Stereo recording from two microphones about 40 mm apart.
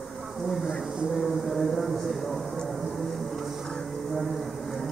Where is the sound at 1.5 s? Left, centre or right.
Centre.